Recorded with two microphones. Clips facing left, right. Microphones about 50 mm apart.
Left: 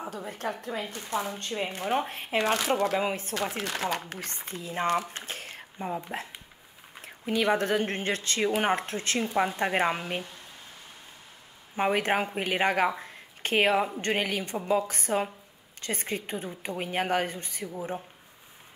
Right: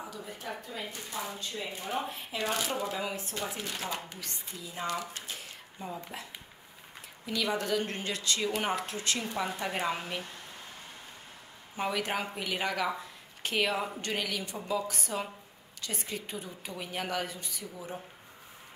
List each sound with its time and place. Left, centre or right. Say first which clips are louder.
0.1 s speech: left 6 dB; left
3.0 s a woman's voice: left 6 dB; left
3.3 s speech: left 6 dB; left
4.2 s a woman's voice: left 5 dB; left
7.2 s a woman's voice: left 6 dB; left
11.7 s a woman's voice: left 6 dB; left